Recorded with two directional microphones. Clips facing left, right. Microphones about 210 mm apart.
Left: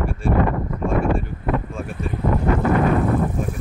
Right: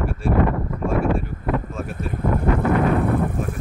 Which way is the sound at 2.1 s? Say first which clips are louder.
Left 1 dB; 55° right (ahead or behind).